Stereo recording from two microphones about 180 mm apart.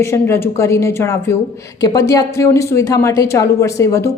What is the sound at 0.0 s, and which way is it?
A woman's voice, 15° left (ahead or behind).